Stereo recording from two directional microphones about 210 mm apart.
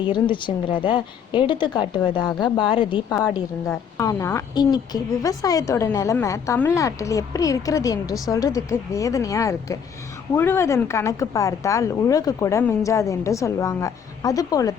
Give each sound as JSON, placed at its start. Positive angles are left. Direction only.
{"t": 0.1, "sound": "a woman's voice", "side_deg": 25}